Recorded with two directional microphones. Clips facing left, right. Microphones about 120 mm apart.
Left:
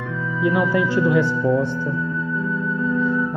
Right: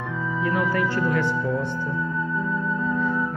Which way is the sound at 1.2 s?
15° right (ahead or behind).